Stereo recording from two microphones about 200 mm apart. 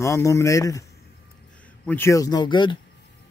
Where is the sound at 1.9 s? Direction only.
15° left (ahead or behind).